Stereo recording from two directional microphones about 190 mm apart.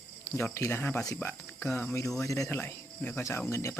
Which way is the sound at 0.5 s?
15° left (ahead or behind).